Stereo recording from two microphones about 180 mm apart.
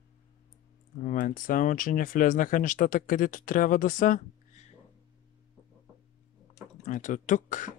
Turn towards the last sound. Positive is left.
turn(degrees=45)  # may be behind; listen again after turning